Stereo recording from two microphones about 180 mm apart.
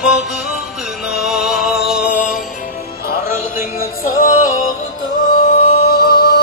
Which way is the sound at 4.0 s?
50° left (ahead or behind).